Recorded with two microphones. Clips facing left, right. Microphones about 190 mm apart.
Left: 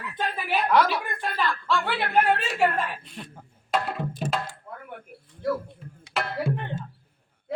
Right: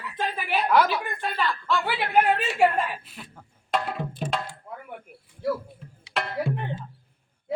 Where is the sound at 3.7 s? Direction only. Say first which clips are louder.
Even; centre (ahead or behind).